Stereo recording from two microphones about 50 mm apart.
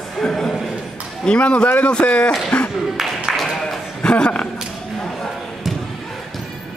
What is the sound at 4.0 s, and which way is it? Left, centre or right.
Speech, centre.